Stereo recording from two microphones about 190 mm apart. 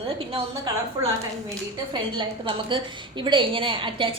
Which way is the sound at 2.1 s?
25° right (ahead or behind).